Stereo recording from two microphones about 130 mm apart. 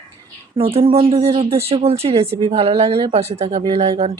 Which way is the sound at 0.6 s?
45° right (ahead or behind).